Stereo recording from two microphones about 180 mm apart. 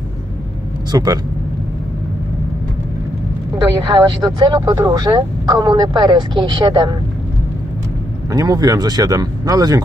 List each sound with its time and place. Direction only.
0.9 s speech: 20° right (ahead or behind)
3.9 s speech: 25° right (ahead or behind)
8.3 s speech: 20° right (ahead or behind)